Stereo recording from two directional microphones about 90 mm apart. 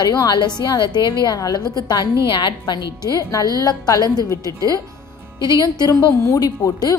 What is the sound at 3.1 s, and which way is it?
A woman's voice, 45° left (ahead or behind).